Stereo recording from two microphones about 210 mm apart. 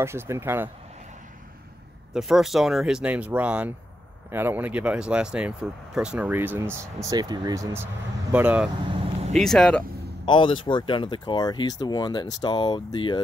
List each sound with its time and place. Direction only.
0.0 s speech: 10° right (ahead or behind)
2.1 s speech: centre (ahead or behind)
8.9 s vehicle: 30° right (ahead or behind)
9.4 s speech: 5° left (ahead or behind)
10.2 s speech: 20° left (ahead or behind)